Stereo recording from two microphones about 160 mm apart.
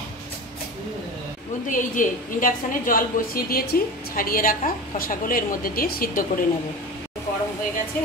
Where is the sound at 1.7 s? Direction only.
55° left (ahead or behind).